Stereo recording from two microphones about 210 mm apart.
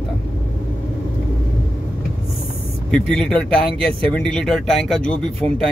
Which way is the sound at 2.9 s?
5° left (ahead or behind).